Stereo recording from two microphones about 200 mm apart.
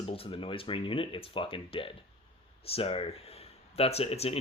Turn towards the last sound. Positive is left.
turn(degrees=30)  # may be behind; listen again after turning